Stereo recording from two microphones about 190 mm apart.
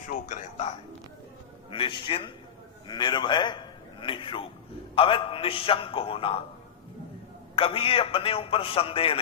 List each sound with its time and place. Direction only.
0.1 s speech: 40° left (ahead or behind)
1.7 s a man's voice: 25° left (ahead or behind)
7.5 s a man's voice: 30° left (ahead or behind)